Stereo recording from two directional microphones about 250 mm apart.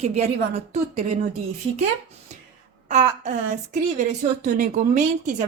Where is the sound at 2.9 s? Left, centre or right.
Right.